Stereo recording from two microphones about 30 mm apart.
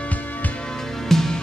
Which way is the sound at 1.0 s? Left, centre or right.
Centre.